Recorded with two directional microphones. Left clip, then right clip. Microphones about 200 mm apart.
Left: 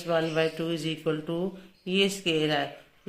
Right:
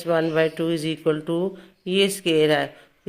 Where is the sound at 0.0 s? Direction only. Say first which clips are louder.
Right 5 dB; 45° right (ahead or behind).